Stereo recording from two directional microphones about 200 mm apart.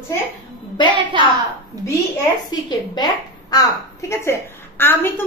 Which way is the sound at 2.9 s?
20° left (ahead or behind).